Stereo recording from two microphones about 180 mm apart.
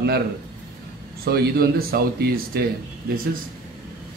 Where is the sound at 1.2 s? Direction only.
60° right (ahead or behind).